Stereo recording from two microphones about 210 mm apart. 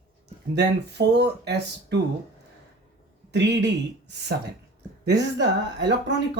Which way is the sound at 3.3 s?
55° right (ahead or behind).